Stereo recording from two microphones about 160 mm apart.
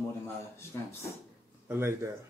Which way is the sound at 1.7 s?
15° right (ahead or behind).